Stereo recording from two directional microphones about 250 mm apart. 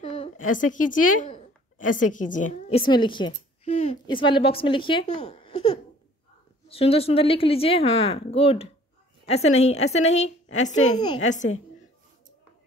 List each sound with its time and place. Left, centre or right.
0.0 s a woman's voice: left